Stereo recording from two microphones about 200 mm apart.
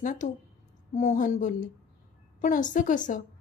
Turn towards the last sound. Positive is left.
turn(degrees=40)  # may be behind; listen again after turning